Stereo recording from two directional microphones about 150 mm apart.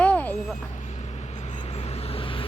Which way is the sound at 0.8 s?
45° left (ahead or behind).